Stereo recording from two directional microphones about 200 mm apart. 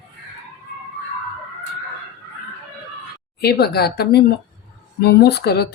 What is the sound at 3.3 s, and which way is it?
A woman's voice, 50° left (ahead or behind).